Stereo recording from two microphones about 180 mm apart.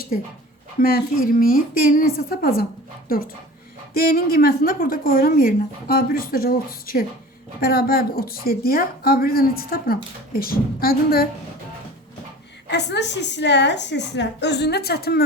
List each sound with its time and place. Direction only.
0.8 s a woman's voice: 55° left (ahead or behind)
3.9 s speech: 55° left (ahead or behind)
12.6 s a woman's voice: 70° left (ahead or behind)